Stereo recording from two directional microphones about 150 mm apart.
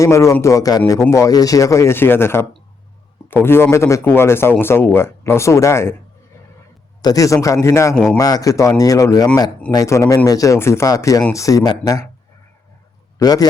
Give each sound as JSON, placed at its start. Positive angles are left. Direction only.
{"t": 0.0, "sound": "speech", "side_deg": 20}
{"t": 7.0, "sound": "speech", "side_deg": 25}
{"t": 7.9, "sound": "a man's voice", "side_deg": 5}
{"t": 8.2, "sound": "speech", "side_deg": 25}
{"t": 13.1, "sound": "a man's voice", "side_deg": 25}